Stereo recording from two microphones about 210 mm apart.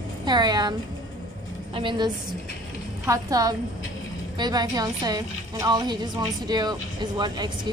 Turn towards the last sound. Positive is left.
turn(degrees=-20)  # may be behind; listen again after turning